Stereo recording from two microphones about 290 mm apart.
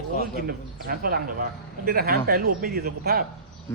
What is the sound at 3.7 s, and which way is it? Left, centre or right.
Speech, centre.